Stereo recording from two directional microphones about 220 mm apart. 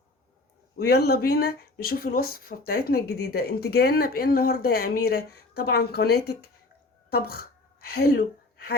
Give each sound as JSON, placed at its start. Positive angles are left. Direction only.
{"t": 0.8, "sound": "speech", "side_deg": 45}